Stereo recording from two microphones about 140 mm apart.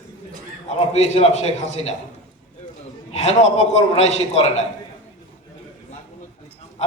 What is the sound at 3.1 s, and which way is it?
A man's voice, 50° left (ahead or behind).